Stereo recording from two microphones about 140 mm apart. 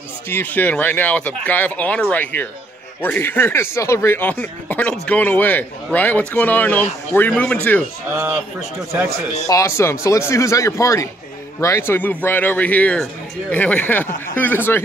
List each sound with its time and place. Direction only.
0.3 s a man's voice: 15° left (ahead or behind)
9.5 s a man's voice: 20° left (ahead or behind)